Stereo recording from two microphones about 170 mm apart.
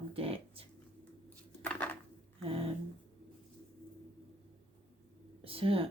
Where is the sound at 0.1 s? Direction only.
35° right (ahead or behind).